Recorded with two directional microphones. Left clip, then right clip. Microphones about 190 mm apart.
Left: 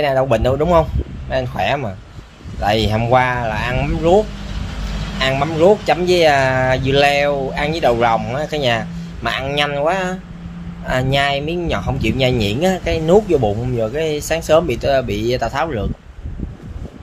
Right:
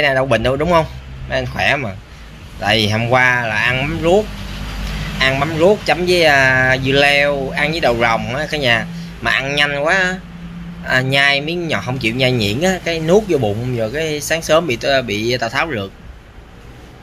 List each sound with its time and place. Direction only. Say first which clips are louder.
0.0 s speech: right 1 dB; 15° left (ahead or behind)
5.2 s speech: even; 15° left (ahead or behind)